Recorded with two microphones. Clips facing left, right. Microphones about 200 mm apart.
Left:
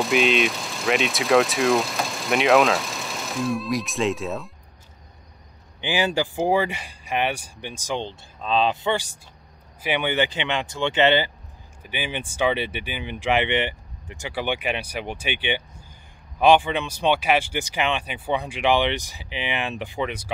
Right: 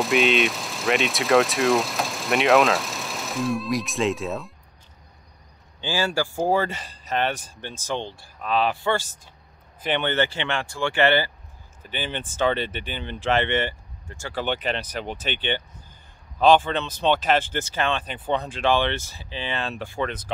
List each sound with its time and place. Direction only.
0.0 s speech: centre (ahead or behind)
5.8 s speech: 20° left (ahead or behind)